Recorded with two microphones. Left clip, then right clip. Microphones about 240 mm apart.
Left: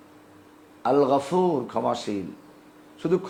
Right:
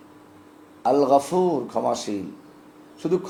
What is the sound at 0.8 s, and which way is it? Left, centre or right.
A man's voice, left.